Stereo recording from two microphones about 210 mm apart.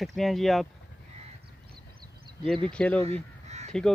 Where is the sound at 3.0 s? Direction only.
30° right (ahead or behind).